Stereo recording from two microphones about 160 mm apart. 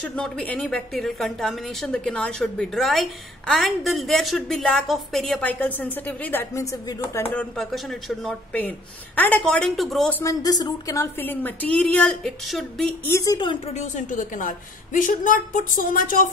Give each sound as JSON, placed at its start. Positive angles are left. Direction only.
{"t": 0.0, "sound": "a woman's voice", "side_deg": 5}
{"t": 7.3, "sound": "a woman's voice", "side_deg": 0}
{"t": 10.2, "sound": "a woman's voice", "side_deg": 25}
{"t": 13.0, "sound": "a woman's voice", "side_deg": 20}
{"t": 13.7, "sound": "a woman's voice", "side_deg": 50}